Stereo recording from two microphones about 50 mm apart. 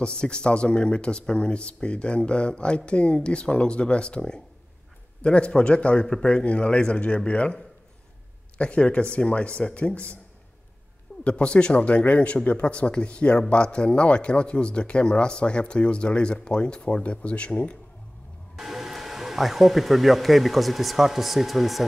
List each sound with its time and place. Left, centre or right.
0.0 s a man's voice: centre
8.5 s speech: left
11.2 s speech: left
18.6 s speech: centre